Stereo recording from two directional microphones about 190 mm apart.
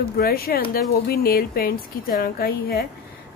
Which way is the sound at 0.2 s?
50° left (ahead or behind).